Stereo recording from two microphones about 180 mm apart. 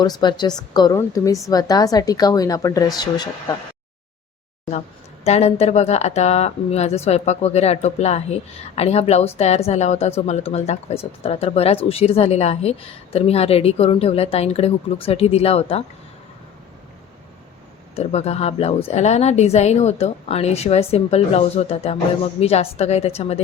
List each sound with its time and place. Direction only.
0.0 s a woman's voice: 25° left (ahead or behind)
5.2 s speech: 35° left (ahead or behind)
17.9 s speech: 35° left (ahead or behind)